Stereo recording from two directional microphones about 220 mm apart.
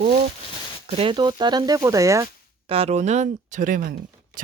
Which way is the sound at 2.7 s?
30° right (ahead or behind).